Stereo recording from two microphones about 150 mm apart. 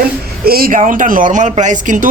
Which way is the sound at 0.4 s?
85° right.